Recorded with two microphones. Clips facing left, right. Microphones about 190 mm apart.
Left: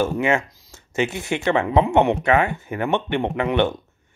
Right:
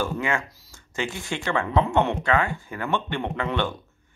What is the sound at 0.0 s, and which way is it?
Speech, 20° left (ahead or behind).